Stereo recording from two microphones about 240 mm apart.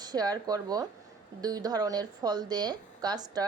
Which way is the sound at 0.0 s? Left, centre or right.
Centre.